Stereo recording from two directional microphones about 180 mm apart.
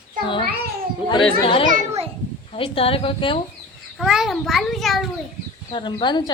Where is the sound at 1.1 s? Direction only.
30° left (ahead or behind).